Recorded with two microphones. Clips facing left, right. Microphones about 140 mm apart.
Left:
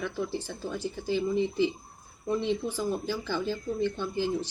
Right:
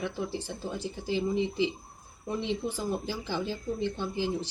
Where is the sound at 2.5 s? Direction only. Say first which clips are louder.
Left 2 dB; 25° right (ahead or behind).